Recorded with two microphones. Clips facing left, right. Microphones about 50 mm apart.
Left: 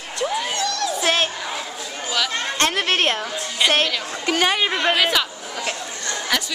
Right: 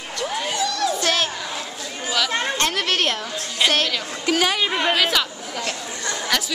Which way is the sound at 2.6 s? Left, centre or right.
Centre.